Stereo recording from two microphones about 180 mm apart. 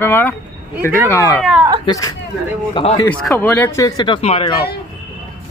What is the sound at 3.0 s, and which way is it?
Speech, 10° left (ahead or behind).